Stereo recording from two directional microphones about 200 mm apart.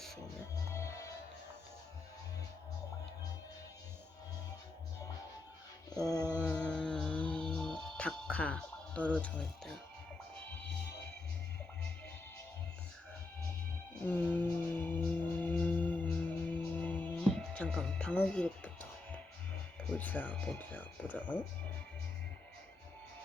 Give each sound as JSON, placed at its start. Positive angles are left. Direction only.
{"t": 0.7, "sound": "music", "side_deg": 15}
{"t": 5.9, "sound": "mantra", "side_deg": 20}
{"t": 6.4, "sound": "music", "side_deg": 5}
{"t": 14.0, "sound": "music", "side_deg": 10}
{"t": 19.9, "sound": "speech", "side_deg": 10}